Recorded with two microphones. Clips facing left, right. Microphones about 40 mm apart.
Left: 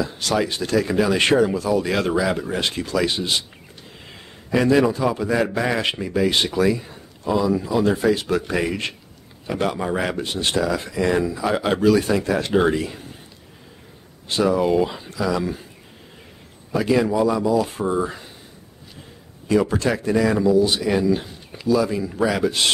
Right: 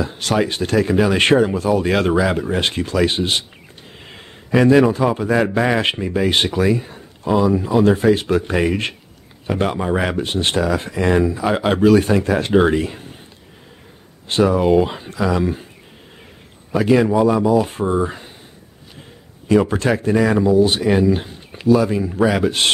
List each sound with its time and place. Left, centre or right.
0.0 s speech: right
4.0 s a sound: right
5.0 s speech: right
14.2 s speech: right
16.7 s speech: right
17.8 s speech: right
19.5 s speech: right